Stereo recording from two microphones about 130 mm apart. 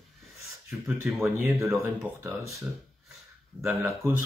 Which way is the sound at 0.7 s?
15° right (ahead or behind).